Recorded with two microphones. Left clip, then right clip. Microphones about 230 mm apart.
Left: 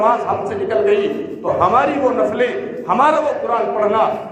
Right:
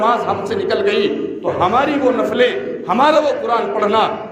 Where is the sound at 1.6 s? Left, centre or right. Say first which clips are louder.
Left 1 dB; right.